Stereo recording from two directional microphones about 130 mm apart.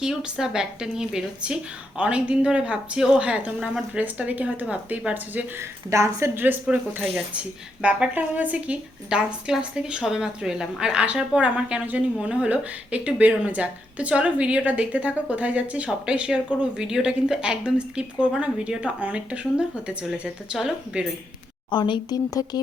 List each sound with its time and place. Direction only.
0.0 s a woman's voice: 5° right (ahead or behind)
21.7 s speech: 35° left (ahead or behind)